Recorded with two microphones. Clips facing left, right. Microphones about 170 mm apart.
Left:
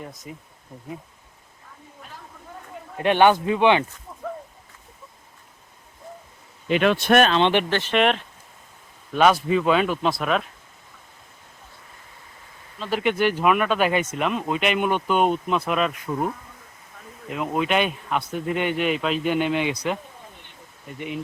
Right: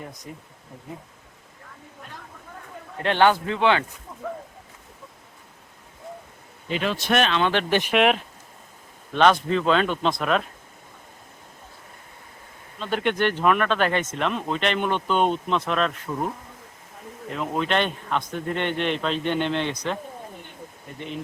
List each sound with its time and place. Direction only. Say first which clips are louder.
0.0 s speech: left 1 dB; centre (ahead or behind)
3.0 s speech: left 2 dB; 15° left (ahead or behind)
6.7 s speech: left 6 dB; 65° left (ahead or behind); by 7.3 s 50° left (ahead or behind)
7.7 s speech: right 2 dB; 15° right (ahead or behind)
7.9 s speech: even; 5° right (ahead or behind)
9.1 s speech: left 1 dB; 5° left (ahead or behind)
12.8 s speech: left 1 dB; 5° left (ahead or behind)
17.2 s speech: left 2 dB; 10° left (ahead or behind)